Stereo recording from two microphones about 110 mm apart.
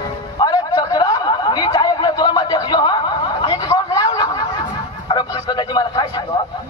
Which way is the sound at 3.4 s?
35° left (ahead or behind).